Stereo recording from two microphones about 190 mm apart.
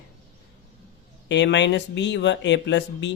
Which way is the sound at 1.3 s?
70° left (ahead or behind).